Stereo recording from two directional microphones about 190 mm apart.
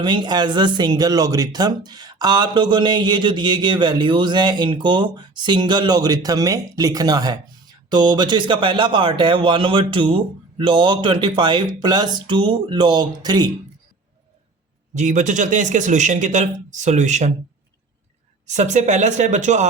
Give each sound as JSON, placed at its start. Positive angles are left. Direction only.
{"t": 0.0, "sound": "speech", "side_deg": -25}
{"t": 14.9, "sound": "a man's voice", "side_deg": -40}
{"t": 18.4, "sound": "a man's voice", "side_deg": -40}